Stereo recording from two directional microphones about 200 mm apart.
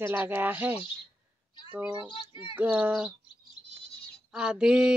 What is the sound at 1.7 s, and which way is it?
Speech, 10° right (ahead or behind).